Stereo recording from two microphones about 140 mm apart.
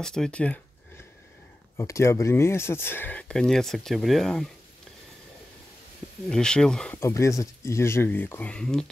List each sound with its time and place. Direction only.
0.0 s speech: 5° left (ahead or behind)
1.8 s speech: 20° left (ahead or behind); by 4.5 s centre (ahead or behind)
6.2 s speech: 5° left (ahead or behind)
7.0 s speech: 20° left (ahead or behind); by 8.9 s 5° left (ahead or behind)